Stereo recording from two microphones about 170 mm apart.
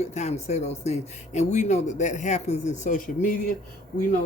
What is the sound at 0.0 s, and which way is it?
Speech, 40° left (ahead or behind).